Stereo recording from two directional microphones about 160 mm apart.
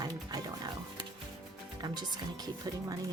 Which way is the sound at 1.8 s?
25° right (ahead or behind).